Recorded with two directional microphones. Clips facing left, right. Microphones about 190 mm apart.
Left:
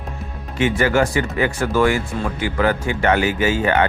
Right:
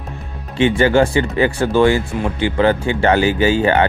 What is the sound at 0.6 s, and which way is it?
Speech, 30° right (ahead or behind).